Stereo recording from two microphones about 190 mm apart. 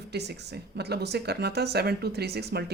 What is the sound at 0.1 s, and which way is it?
Speech, 60° right (ahead or behind).